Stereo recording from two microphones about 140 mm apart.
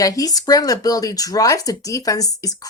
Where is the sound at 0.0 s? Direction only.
25° left (ahead or behind).